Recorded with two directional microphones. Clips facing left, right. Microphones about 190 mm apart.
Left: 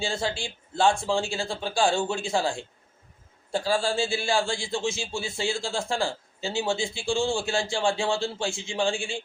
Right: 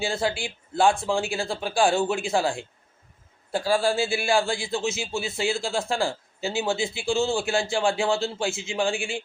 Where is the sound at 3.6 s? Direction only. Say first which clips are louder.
Right 3 dB; 15° right (ahead or behind).